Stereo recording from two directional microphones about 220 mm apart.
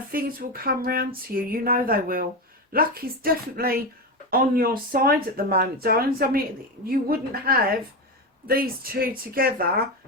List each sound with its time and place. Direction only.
0.1 s a woman's voice: 40° right (ahead or behind)